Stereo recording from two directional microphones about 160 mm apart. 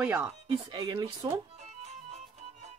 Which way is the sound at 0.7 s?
25° right (ahead or behind).